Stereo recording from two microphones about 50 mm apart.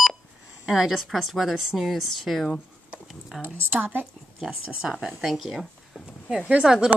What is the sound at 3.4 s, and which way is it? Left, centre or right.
Speech, right.